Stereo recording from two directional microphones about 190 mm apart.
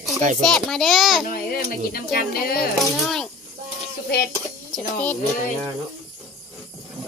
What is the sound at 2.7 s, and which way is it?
Speech, centre (ahead or behind).